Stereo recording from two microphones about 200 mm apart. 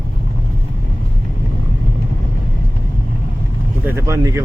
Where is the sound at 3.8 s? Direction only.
10° right (ahead or behind).